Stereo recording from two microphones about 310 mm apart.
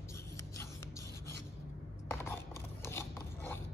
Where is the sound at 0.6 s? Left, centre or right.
Centre.